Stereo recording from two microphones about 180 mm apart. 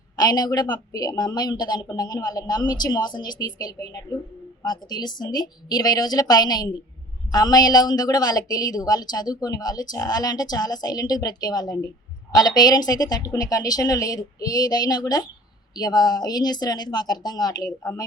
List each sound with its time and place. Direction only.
0.2 s a woman's voice: 20° left (ahead or behind)